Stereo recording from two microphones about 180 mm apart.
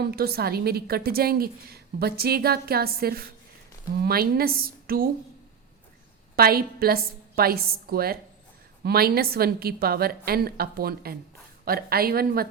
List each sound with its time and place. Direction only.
0.0 s a woman's voice: 60° right (ahead or behind)
6.3 s a woman's voice: 55° right (ahead or behind)